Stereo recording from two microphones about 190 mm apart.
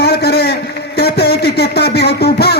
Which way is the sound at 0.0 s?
55° left (ahead or behind).